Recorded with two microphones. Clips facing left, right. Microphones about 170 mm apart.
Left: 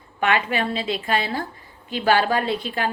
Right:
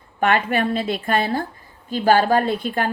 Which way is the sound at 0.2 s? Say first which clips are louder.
Right 3 dB; 50° right (ahead or behind).